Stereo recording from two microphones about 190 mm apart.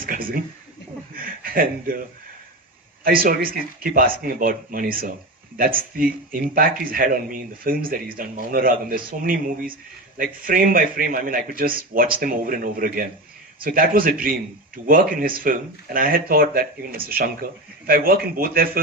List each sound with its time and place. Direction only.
0.0 s a sound: 50° right (ahead or behind)
1.1 s chuckle: 50° right (ahead or behind)
3.0 s speech: 50° right (ahead or behind)